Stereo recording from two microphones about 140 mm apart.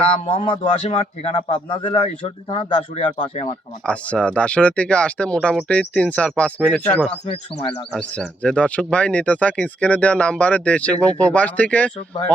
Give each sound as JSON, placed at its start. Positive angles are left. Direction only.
{"t": 0.3, "sound": "speech", "side_deg": 35}
{"t": 3.8, "sound": "speech", "side_deg": 5}